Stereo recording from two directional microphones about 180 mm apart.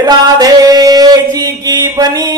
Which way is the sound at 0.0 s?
20° right (ahead or behind).